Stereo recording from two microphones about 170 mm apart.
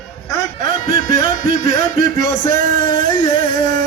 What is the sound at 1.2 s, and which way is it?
Music, 55° right (ahead or behind).